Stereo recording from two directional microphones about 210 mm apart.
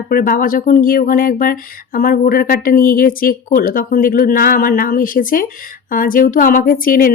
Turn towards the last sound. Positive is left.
turn(degrees=40)  # may be behind; listen again after turning